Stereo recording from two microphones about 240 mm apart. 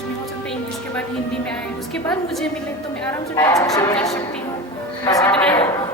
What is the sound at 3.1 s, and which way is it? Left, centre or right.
A woman's voice, centre.